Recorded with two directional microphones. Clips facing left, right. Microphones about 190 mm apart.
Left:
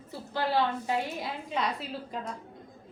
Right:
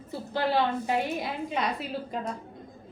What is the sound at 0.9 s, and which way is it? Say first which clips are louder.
Speech: right 3 dB; 15° right (ahead or behind).